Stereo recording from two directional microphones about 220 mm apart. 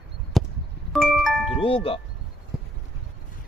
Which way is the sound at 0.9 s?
Centre (ahead or behind).